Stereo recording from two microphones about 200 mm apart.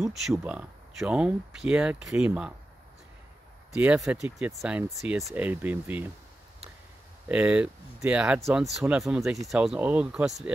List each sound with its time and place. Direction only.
0.0 s speech: centre (ahead or behind)
3.7 s speech: 5° right (ahead or behind)
7.2 s speech: 5° right (ahead or behind)